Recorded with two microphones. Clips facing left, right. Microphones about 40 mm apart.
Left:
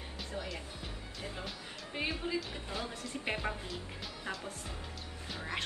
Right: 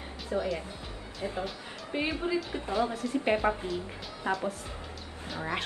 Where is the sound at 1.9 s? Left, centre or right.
Right.